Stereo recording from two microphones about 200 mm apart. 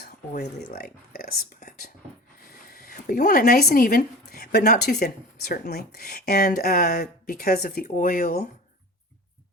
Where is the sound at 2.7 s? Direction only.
50° left (ahead or behind).